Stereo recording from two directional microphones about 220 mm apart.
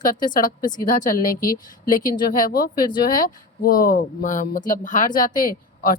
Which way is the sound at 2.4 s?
40° left (ahead or behind).